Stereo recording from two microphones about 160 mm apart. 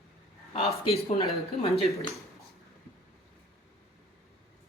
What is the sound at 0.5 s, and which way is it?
Speech, 40° left (ahead or behind).